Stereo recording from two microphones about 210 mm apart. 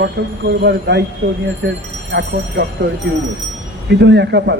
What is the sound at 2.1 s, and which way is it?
Speech, 50° right (ahead or behind).